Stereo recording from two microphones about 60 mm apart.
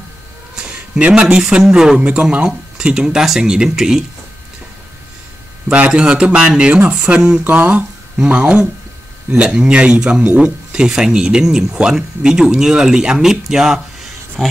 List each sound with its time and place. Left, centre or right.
0.6 s speech: centre
5.7 s speech: centre
14.4 s speech: centre